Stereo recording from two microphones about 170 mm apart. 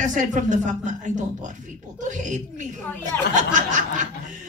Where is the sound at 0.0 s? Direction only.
45° right (ahead or behind).